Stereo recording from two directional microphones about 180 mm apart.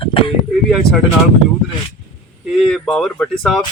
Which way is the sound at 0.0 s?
30° left (ahead or behind).